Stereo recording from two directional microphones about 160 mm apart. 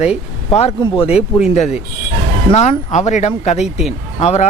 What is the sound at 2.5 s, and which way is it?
Speech, 45° left (ahead or behind).